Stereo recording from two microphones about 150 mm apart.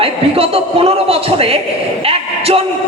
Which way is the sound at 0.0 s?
40° right (ahead or behind).